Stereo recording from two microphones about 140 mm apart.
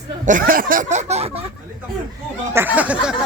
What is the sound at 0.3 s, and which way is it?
Speech, 80° right.